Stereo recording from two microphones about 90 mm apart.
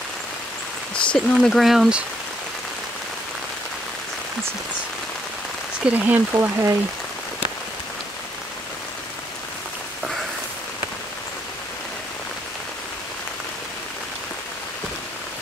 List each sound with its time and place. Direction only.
1.0 s speech: 10° left (ahead or behind)
5.9 s speech: 20° right (ahead or behind)
6.3 s speech: 35° right (ahead or behind)